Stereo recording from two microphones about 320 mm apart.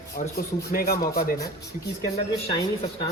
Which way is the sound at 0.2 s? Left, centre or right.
Left.